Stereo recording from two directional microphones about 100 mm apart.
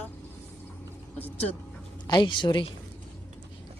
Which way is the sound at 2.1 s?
50° left (ahead or behind).